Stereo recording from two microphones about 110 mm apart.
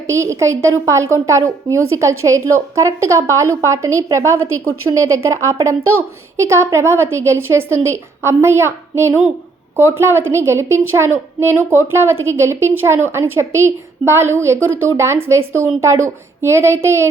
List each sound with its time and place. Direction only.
0.1 s a woman's voice: 25° right (ahead or behind)